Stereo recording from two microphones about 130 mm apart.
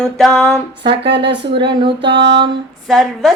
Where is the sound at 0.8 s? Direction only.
40° right (ahead or behind).